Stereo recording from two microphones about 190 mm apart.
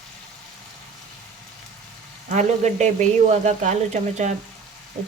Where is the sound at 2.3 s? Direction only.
40° right (ahead or behind).